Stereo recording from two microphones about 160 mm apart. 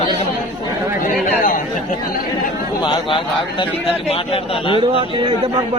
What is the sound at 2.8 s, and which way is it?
A man's voice, 30° left (ahead or behind).